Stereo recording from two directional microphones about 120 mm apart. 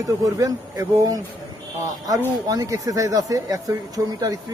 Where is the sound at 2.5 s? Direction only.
30° right (ahead or behind).